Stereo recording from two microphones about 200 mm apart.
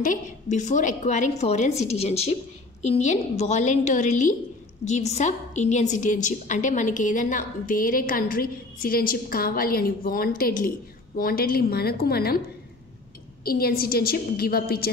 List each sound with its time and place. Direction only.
0.0 s a woman's voice: 40° left (ahead or behind)
13.4 s a woman's voice: 50° left (ahead or behind)